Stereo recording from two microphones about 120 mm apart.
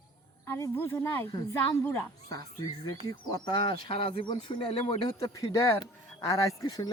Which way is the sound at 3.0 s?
35° left (ahead or behind).